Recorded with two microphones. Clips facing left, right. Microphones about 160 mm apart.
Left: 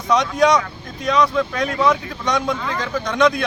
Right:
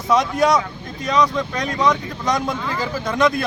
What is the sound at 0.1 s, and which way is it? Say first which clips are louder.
Speech: left 1 dB; centre (ahead or behind).